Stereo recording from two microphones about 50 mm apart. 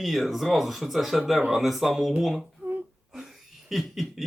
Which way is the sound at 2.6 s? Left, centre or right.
Right.